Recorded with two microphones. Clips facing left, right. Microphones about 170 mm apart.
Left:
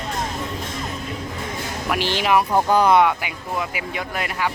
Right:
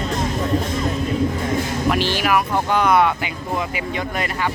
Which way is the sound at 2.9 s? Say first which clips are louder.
Even; 10° left (ahead or behind).